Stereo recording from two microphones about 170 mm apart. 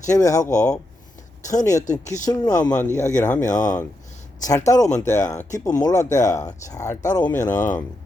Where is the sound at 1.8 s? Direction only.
45° left (ahead or behind).